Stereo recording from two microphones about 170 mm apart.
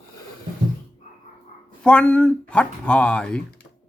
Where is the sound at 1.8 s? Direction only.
5° left (ahead or behind).